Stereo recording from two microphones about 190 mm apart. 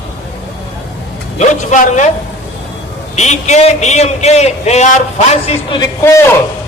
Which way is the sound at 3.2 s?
35° left (ahead or behind).